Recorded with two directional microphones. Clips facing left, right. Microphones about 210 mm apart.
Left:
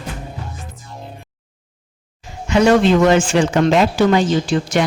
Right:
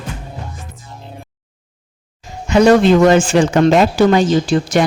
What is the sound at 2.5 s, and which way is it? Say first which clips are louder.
Speech: right 3 dB; 40° right (ahead or behind).